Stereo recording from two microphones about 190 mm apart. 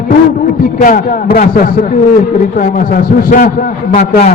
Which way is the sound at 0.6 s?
45° left (ahead or behind).